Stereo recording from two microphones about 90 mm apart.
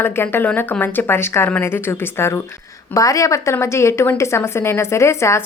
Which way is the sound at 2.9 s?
40° left (ahead or behind).